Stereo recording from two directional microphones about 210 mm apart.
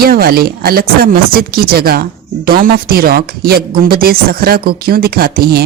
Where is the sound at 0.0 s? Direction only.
45° right (ahead or behind).